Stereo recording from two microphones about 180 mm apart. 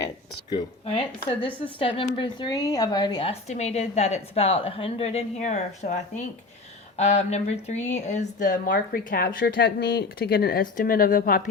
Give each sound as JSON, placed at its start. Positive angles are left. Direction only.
{"t": 0.5, "sound": "a woman's voice", "side_deg": 35}
{"t": 3.4, "sound": "a woman's voice", "side_deg": 40}
{"t": 8.7, "sound": "speech", "side_deg": 60}